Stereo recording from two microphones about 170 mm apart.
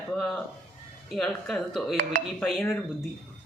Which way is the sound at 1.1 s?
Centre (ahead or behind).